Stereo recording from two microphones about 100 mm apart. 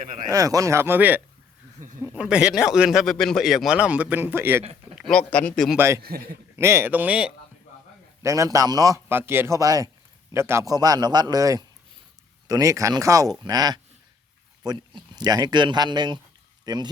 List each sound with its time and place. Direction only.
0.3 s speech: 35° right (ahead or behind); by 3.8 s centre (ahead or behind)
3.8 s speech: 15° right (ahead or behind)
5.0 s speech: 10° left (ahead or behind)
5.7 s speech: 25° right (ahead or behind)
8.2 s a man's voice: 30° right (ahead or behind)
9.0 s speech: 25° right (ahead or behind)
9.6 s a man's voice: 35° right (ahead or behind)
10.7 s a man's voice: 40° right (ahead or behind)